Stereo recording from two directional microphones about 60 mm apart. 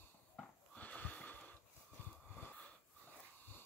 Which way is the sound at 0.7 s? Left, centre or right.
Left.